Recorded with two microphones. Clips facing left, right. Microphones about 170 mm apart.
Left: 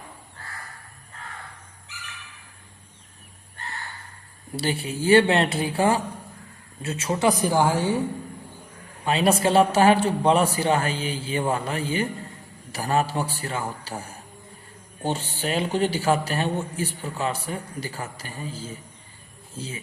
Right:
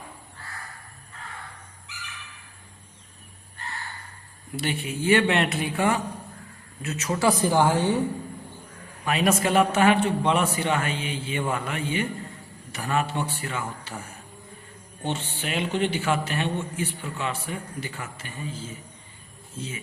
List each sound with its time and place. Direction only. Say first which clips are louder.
4.5 s a man's voice: left 2 dB; 35° left (ahead or behind); by 8.0 s 10° left (ahead or behind)
9.0 s a man's voice: left 2 dB; 30° left (ahead or behind)